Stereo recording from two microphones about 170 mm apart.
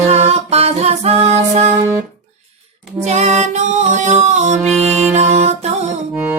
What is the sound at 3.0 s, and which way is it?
Music, 40° right (ahead or behind).